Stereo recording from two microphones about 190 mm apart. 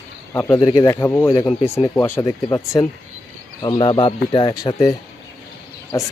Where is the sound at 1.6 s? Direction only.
35° left (ahead or behind).